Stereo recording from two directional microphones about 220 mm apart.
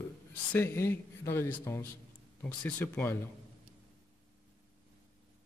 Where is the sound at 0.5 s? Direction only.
10° left (ahead or behind).